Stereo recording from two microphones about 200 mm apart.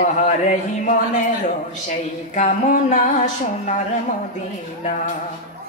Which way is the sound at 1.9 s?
35° left (ahead or behind).